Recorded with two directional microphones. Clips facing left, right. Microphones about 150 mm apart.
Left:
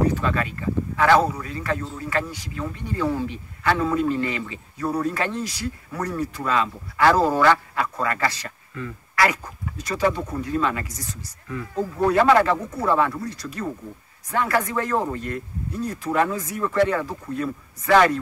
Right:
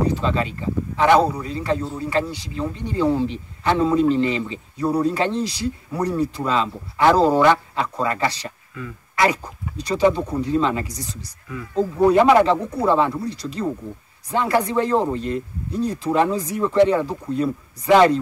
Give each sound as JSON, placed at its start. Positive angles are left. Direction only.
{"t": 0.2, "sound": "a man's voice", "side_deg": -25}